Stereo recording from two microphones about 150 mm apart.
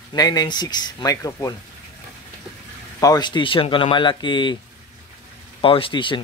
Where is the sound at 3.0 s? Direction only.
25° left (ahead or behind).